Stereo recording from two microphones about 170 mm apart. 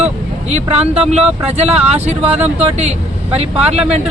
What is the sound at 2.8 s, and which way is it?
Speech, 40° right (ahead or behind).